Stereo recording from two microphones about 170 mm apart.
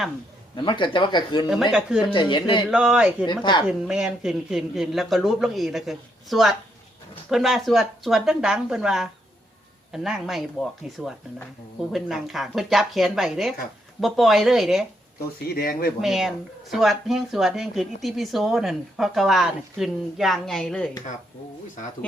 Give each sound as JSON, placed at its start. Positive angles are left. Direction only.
{"t": 0.5, "sound": "speech", "side_deg": 25}
{"t": 2.6, "sound": "speech", "side_deg": -5}
{"t": 3.2, "sound": "speech", "side_deg": 25}
{"t": 3.7, "sound": "speech", "side_deg": -5}
{"t": 15.5, "sound": "speech", "side_deg": 60}
{"t": 16.0, "sound": "speech", "side_deg": 0}